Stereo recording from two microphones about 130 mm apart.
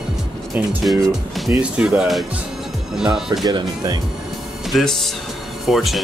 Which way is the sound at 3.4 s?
30° right (ahead or behind).